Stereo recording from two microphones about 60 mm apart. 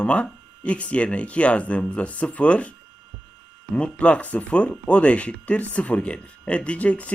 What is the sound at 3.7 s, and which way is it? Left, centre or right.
Speech, centre.